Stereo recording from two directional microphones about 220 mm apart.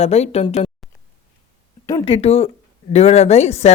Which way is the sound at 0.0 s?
30° left (ahead or behind).